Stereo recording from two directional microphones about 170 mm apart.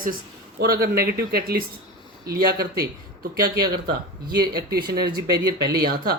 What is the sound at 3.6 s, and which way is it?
Speech, 25° right (ahead or behind).